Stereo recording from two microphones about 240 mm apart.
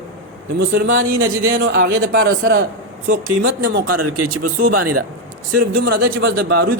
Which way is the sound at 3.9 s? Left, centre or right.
Right.